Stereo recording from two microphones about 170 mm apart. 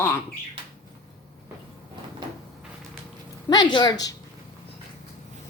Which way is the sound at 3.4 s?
25° left (ahead or behind).